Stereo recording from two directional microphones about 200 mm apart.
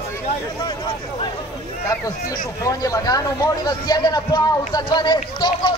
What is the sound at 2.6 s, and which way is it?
A man's voice, 15° left (ahead or behind).